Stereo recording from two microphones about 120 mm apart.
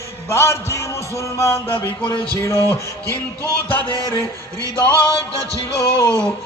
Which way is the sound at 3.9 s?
40° left (ahead or behind).